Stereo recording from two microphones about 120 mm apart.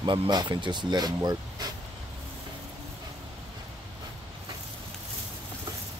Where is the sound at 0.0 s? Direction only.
40° right (ahead or behind).